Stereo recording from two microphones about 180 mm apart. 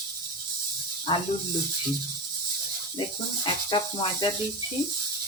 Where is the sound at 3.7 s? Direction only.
25° left (ahead or behind).